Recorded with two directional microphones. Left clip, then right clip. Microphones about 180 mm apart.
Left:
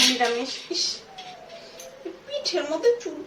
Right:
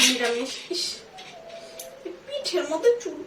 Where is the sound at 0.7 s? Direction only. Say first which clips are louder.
Left 5 dB; centre (ahead or behind).